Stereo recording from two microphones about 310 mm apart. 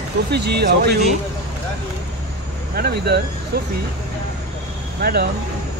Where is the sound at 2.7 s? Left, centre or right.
Right.